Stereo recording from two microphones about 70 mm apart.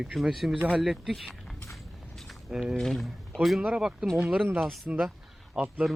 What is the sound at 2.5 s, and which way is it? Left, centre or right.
Speech, centre.